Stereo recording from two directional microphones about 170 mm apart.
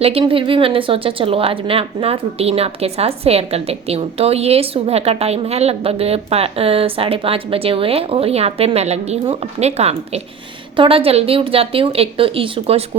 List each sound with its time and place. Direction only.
0.0 s a woman's voice: 35° right (ahead or behind)